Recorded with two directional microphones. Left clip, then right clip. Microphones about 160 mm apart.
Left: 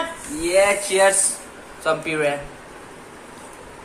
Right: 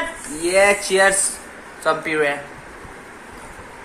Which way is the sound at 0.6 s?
40° right (ahead or behind).